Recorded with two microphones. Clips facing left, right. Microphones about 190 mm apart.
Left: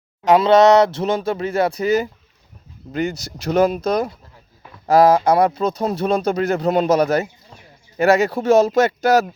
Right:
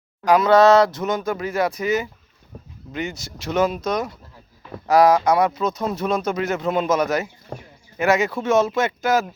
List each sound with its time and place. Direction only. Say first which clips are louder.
0.3 s speech: left 2 dB; 25° left (ahead or behind)
7.5 s a sound: right 11 dB; 55° right (ahead or behind)
7.9 s speech: left 4 dB; 35° left (ahead or behind)